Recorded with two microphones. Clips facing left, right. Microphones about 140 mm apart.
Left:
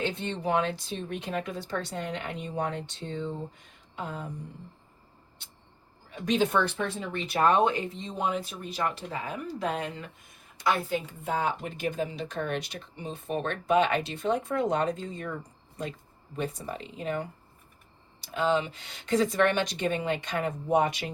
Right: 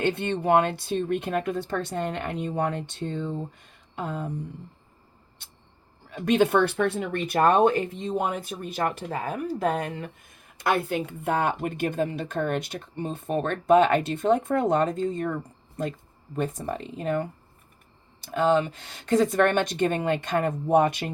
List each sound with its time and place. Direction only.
0.0 s speech: 60° right (ahead or behind)
6.1 s speech: 60° right (ahead or behind)
10.6 s speech: 60° right (ahead or behind)